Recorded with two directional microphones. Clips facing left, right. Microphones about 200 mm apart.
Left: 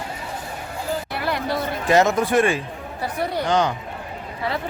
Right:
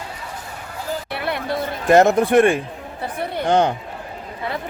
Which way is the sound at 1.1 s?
60° right (ahead or behind).